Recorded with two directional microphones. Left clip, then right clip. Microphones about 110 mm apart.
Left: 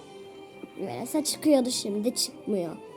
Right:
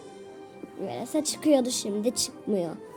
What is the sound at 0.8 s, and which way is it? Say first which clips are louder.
Speech: right 1 dB; 55° left (ahead or behind).